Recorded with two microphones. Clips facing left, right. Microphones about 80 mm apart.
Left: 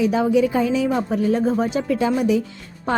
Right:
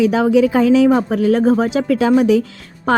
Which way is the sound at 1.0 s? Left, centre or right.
Right.